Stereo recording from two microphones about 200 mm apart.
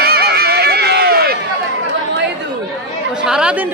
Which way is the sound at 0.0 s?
50° right (ahead or behind).